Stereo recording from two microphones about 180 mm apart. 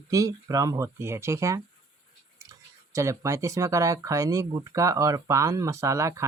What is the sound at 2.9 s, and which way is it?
Speech, 15° right (ahead or behind).